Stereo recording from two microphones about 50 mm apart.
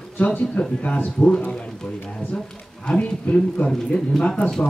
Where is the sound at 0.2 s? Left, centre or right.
Left.